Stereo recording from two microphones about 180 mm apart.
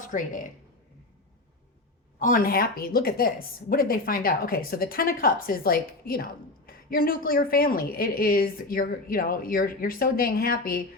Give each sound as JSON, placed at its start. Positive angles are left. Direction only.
{"t": 0.1, "sound": "a woman's voice", "side_deg": 45}
{"t": 2.1, "sound": "a woman's voice", "side_deg": 45}